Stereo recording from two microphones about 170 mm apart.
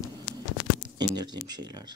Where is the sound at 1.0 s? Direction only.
25° right (ahead or behind).